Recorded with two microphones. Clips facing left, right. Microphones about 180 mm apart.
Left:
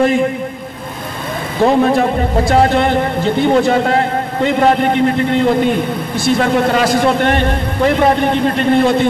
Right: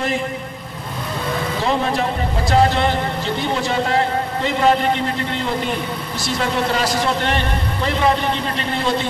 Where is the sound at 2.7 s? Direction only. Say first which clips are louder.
Left 6 dB; 55° left (ahead or behind).